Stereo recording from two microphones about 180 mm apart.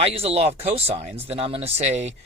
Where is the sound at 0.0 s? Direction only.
35° right (ahead or behind).